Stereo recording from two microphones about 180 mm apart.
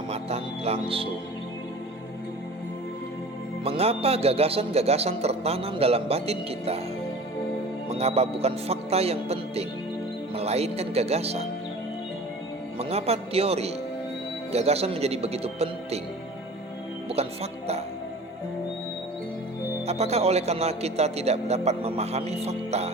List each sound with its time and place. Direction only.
0.1 s speech: 35° right (ahead or behind)
3.6 s speech: 35° right (ahead or behind)
7.9 s speech: 35° right (ahead or behind)
12.8 s speech: 35° right (ahead or behind)
17.1 s speech: 35° right (ahead or behind)
19.8 s speech: 35° right (ahead or behind)